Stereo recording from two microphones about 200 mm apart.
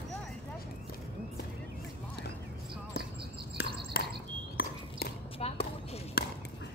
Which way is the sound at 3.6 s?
55° left (ahead or behind).